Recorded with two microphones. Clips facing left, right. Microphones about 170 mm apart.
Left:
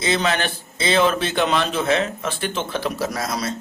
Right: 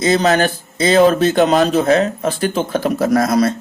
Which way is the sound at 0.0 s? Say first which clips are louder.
Right 8 dB; 45° right (ahead or behind).